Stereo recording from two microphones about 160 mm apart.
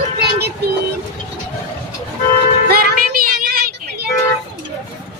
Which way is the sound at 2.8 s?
80° right.